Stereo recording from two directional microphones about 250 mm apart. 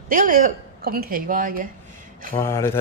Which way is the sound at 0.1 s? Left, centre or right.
Right.